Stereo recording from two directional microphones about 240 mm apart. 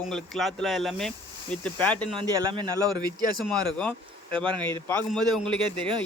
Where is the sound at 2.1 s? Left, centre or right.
Centre.